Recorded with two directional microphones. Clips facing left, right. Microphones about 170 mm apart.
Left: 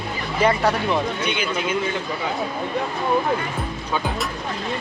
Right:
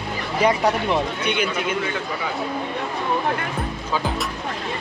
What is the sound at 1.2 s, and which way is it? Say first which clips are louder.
Speech: right 2 dB; 60° right (ahead or behind).